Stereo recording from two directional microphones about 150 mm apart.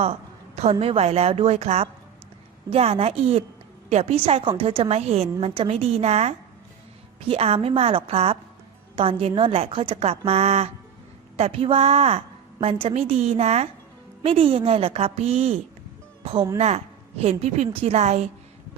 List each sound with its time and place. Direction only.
0.0 s a woman's voice: 45° right (ahead or behind)